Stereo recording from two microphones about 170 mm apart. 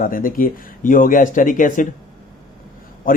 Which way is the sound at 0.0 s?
55° left (ahead or behind).